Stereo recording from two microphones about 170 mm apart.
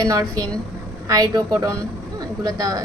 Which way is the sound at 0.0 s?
20° right (ahead or behind).